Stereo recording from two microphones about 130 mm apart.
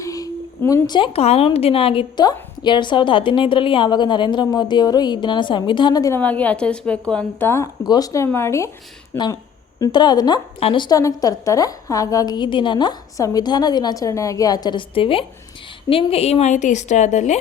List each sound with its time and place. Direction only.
0.0 s a sound: 25° left (ahead or behind)
0.9 s a woman's voice: 40° left (ahead or behind)
6.1 s a woman's voice: 10° left (ahead or behind)
9.8 s a woman's voice: 35° left (ahead or behind)
10.6 s a woman's voice: 45° left (ahead or behind)
10.8 s a woman's voice: 30° left (ahead or behind); by 17.3 s 65° left (ahead or behind)